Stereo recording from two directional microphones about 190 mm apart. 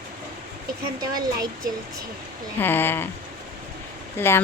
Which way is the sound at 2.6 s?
10° left (ahead or behind).